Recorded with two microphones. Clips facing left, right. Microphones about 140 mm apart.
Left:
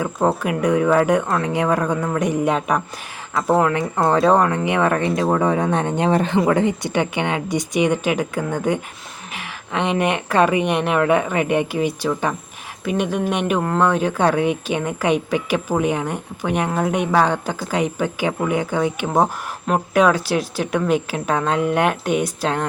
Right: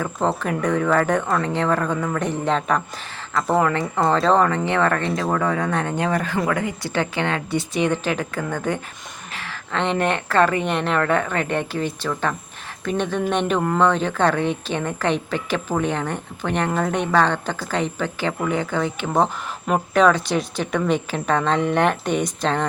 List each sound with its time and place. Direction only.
0.0 s speech: 10° left (ahead or behind)
3.3 s speech: centre (ahead or behind)
4.3 s speech: 15° left (ahead or behind)
19.1 s speech: centre (ahead or behind)